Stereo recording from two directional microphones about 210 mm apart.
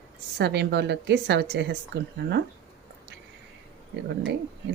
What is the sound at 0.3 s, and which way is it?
Speech, 50° right (ahead or behind).